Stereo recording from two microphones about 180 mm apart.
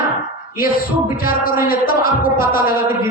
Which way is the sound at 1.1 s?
55° left (ahead or behind).